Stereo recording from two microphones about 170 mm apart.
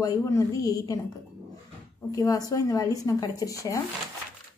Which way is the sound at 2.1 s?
20° left (ahead or behind).